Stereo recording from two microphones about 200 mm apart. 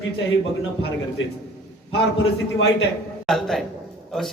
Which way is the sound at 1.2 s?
75° left (ahead or behind).